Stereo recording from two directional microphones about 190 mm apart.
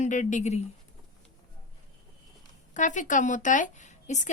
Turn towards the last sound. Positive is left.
turn(degrees=40)  # may be behind; listen again after turning